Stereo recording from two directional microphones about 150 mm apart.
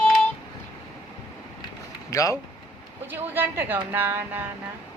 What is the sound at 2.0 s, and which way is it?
Speech, 20° left (ahead or behind).